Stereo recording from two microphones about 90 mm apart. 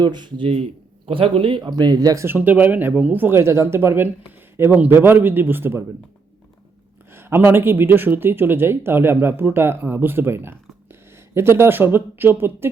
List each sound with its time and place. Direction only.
0.0 s speech: 55° right (ahead or behind); by 0.6 s 80° right
1.0 s speech: 90° right; by 2.2 s 45° right (ahead or behind)
2.2 s speech: 20° right (ahead or behind)
7.1 s speech: 25° right (ahead or behind)